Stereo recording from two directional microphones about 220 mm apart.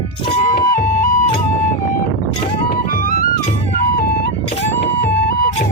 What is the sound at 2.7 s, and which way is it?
Music, 40° left (ahead or behind).